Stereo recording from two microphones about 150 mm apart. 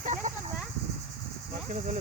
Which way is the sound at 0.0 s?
50° right (ahead or behind).